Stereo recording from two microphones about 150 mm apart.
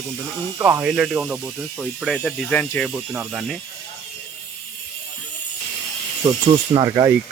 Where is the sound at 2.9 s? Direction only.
5° right (ahead or behind).